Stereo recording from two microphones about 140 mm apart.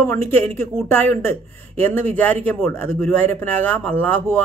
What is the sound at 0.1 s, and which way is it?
Speech, 15° left (ahead or behind).